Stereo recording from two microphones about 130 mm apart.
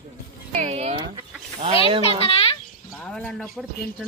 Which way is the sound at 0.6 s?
55° right (ahead or behind).